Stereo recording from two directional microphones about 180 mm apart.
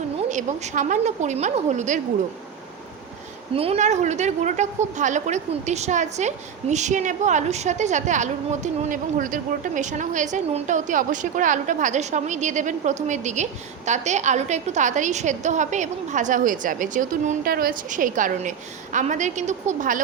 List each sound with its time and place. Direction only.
0.3 s a woman's voice: 40° right (ahead or behind)
3.5 s a woman's voice: 35° right (ahead or behind)